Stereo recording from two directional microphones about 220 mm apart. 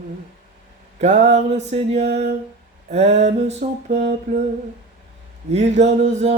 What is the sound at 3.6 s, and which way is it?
Music, 35° right (ahead or behind).